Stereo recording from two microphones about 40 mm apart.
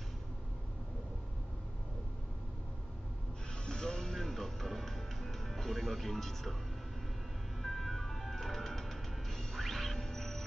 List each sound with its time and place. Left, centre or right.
3.6 s music: centre
4.2 s music: centre
7.6 s ice cream truck: centre